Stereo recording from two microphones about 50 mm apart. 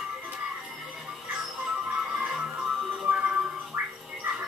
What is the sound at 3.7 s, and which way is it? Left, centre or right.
Gargling, right.